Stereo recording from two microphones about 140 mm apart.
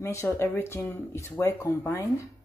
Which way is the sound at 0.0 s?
20° left (ahead or behind).